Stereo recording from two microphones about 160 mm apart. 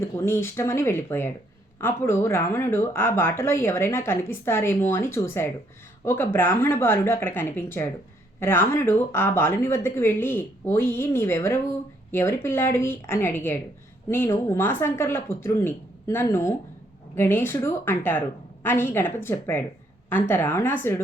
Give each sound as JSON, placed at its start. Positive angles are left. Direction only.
{"t": 0.0, "sound": "speech", "side_deg": 15}